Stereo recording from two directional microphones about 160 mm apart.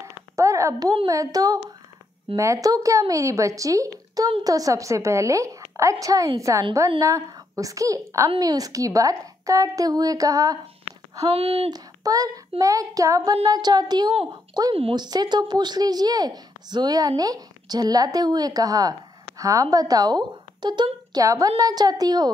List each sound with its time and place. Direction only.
0.0 s a sound: 20° right (ahead or behind)
1.0 s a woman's voice: 20° right (ahead or behind)
11.2 s speech: 35° right (ahead or behind)
11.7 s a woman's voice: 20° right (ahead or behind)